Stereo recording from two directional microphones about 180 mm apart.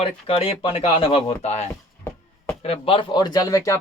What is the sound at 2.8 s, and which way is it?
Speech, 30° left (ahead or behind).